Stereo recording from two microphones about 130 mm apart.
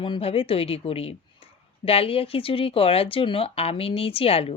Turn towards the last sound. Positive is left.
turn(degrees=45)  # may be behind; listen again after turning